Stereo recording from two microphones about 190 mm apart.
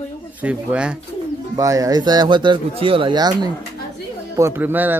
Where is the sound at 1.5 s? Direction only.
20° right (ahead or behind).